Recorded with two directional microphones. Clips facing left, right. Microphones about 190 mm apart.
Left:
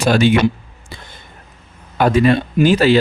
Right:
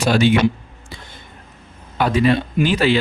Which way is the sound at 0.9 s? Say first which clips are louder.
Left 1 dB; 50° left (ahead or behind).